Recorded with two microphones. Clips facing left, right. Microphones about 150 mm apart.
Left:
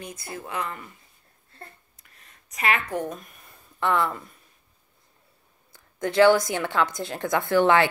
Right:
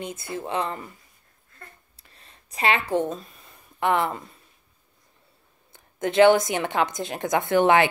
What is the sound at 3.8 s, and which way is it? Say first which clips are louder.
Speech: right 1 dB; 20° right (ahead or behind).